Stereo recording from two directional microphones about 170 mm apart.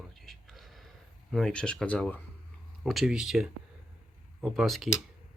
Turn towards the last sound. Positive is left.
turn(degrees=0)  # may be behind; listen again after turning